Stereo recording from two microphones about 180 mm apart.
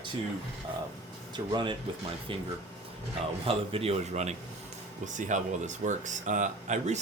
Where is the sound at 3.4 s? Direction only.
30° right (ahead or behind).